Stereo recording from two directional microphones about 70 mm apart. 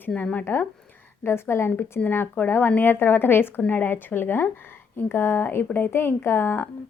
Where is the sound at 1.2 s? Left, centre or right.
Left.